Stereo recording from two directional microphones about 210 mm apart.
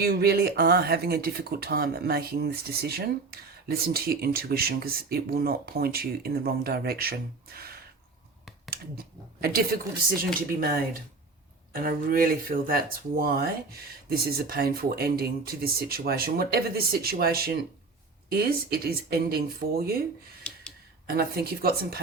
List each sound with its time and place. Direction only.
0.0 s speech: 50° right (ahead or behind)
9.4 s speech: 45° right (ahead or behind)
21.1 s speech: 45° right (ahead or behind)